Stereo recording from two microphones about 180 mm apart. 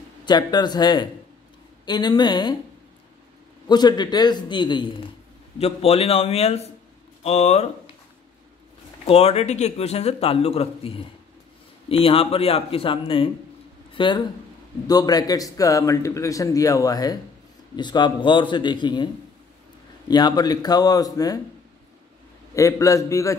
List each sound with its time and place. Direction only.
0.2 s a man's voice: 25° left (ahead or behind)
3.6 s a man's voice: 25° left (ahead or behind)
9.0 s a man's voice: 35° left (ahead or behind)
20.1 s a man's voice: 25° left (ahead or behind)
22.5 s a man's voice: 15° left (ahead or behind)